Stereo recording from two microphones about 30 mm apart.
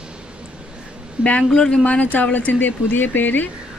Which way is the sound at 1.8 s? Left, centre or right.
Left.